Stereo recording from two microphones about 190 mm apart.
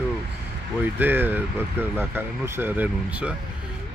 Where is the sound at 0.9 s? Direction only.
10° right (ahead or behind).